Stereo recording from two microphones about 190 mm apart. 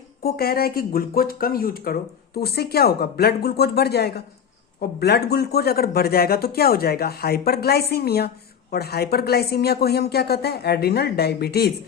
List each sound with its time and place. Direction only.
0.2 s speech: 55° left (ahead or behind)